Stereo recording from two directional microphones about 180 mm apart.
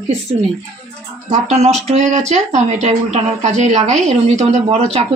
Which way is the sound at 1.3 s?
40° right (ahead or behind).